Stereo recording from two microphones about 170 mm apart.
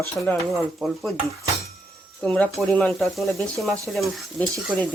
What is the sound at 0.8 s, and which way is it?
Speech, 5° right (ahead or behind).